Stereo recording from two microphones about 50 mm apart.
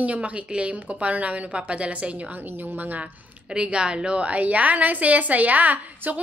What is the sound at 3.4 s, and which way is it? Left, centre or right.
A woman's voice, centre.